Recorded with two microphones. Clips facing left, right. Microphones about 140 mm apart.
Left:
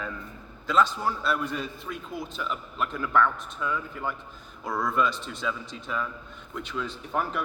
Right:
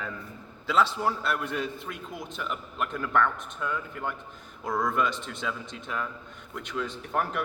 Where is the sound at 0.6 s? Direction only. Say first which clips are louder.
Left 1 dB; 70° right (ahead or behind).